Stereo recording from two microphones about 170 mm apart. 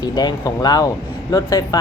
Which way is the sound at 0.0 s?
25° left (ahead or behind).